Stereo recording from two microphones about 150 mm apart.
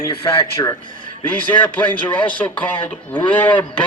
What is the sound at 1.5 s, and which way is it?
A man's voice, 10° left (ahead or behind).